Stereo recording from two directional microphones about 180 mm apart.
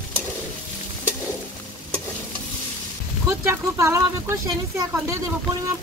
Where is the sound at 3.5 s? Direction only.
15° right (ahead or behind).